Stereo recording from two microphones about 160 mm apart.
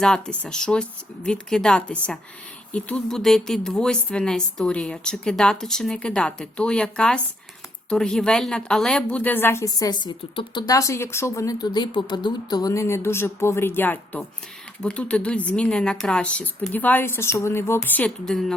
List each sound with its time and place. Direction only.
0.0 s a woman's voice: 5° left (ahead or behind)